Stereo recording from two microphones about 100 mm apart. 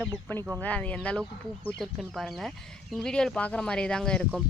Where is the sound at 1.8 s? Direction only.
Centre (ahead or behind).